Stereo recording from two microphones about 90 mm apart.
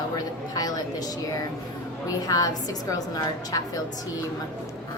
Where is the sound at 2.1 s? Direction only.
45° left (ahead or behind).